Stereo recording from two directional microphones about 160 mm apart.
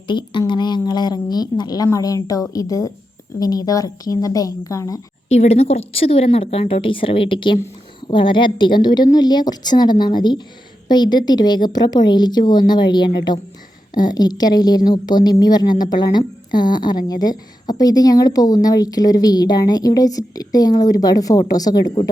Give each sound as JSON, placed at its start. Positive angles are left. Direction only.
{"t": 0.1, "sound": "a woman's voice", "side_deg": 30}
{"t": 5.3, "sound": "a woman's voice", "side_deg": 45}